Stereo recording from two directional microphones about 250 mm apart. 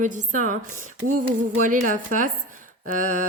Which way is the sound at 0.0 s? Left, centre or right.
Right.